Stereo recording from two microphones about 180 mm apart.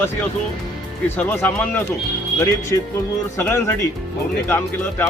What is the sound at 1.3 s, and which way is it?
Speech, 10° left (ahead or behind).